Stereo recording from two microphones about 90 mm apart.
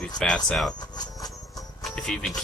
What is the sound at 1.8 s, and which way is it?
Music, 5° left (ahead or behind).